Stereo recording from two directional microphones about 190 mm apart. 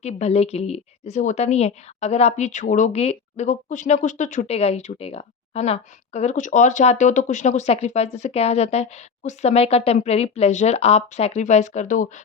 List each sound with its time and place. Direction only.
0.0 s speech: 35° left (ahead or behind)